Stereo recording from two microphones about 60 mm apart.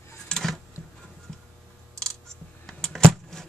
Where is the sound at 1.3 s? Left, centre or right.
Centre.